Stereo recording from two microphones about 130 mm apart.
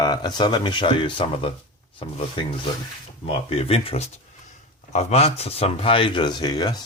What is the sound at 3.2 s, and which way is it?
Speech, 50° left (ahead or behind).